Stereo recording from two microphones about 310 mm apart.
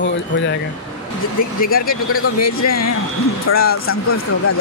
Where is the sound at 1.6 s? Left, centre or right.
Left.